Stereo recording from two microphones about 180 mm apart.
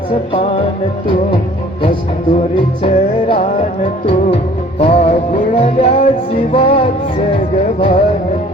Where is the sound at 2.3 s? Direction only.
30° left (ahead or behind).